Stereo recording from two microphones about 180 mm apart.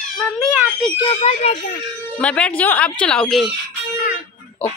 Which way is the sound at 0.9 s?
35° left (ahead or behind).